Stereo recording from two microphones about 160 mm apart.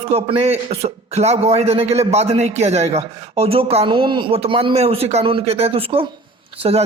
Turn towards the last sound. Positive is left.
turn(degrees=-40)  # may be behind; listen again after turning